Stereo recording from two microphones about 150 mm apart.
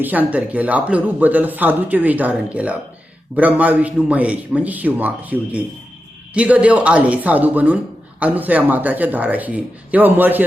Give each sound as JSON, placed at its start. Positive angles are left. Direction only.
{"t": 0.0, "sound": "speech", "side_deg": -10}